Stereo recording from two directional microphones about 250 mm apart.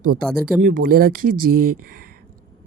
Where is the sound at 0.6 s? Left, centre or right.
Right.